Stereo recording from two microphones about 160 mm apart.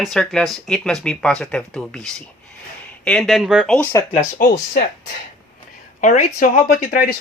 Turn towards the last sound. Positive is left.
turn(degrees=65)  # may be behind; listen again after turning